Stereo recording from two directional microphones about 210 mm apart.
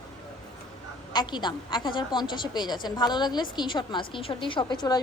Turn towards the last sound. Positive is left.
turn(degrees=20)  # may be behind; listen again after turning